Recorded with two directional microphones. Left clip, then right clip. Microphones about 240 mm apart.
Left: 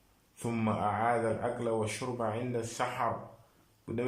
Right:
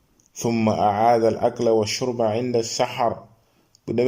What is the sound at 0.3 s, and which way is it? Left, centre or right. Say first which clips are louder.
Speech: right 12 dB; right.